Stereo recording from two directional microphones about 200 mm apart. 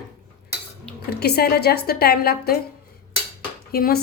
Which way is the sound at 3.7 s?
50° left (ahead or behind).